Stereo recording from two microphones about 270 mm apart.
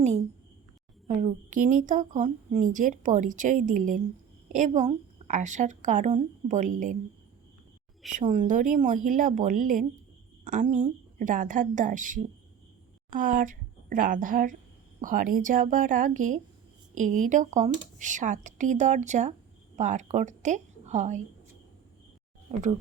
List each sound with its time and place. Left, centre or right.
1.0 s a woman's voice: right
8.1 s a woman's voice: right